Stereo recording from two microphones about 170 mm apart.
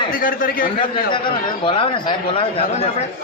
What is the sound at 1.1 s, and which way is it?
Speech, 30° left (ahead or behind).